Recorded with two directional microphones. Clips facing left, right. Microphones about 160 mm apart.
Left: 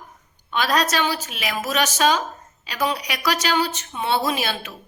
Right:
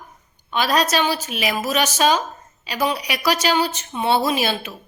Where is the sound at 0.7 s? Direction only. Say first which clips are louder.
Right 3 dB; 5° right (ahead or behind).